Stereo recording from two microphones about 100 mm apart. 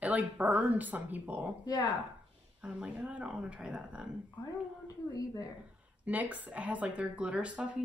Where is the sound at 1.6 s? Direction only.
40° left (ahead or behind).